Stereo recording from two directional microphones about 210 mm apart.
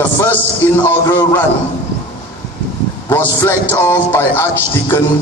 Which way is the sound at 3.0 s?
10° left (ahead or behind).